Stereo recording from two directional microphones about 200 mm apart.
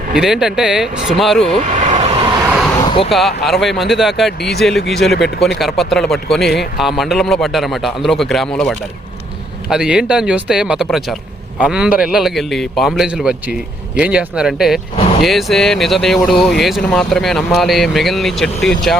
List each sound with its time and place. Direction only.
0.1 s a man's voice: centre (ahead or behind)
1.6 s vehicle: 35° right (ahead or behind)
2.5 s vehicle: centre (ahead or behind)
3.1 s a man's voice: centre (ahead or behind)